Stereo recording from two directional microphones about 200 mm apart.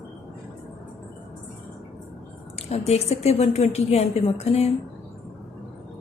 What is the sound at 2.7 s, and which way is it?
A woman's voice, 30° left (ahead or behind).